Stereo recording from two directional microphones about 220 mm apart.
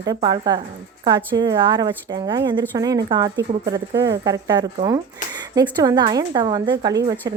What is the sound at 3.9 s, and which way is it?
Speech, 50° right (ahead or behind).